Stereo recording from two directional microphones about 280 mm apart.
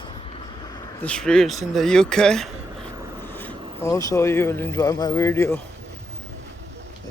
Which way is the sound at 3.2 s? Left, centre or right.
Centre.